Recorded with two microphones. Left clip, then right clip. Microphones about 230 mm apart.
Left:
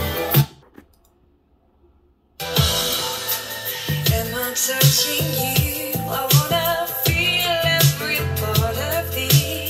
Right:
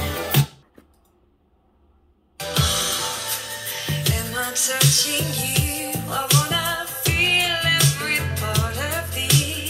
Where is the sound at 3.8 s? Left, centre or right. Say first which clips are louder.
Left 3 dB; centre.